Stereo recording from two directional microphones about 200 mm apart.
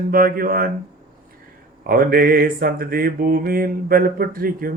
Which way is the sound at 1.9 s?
50° right (ahead or behind).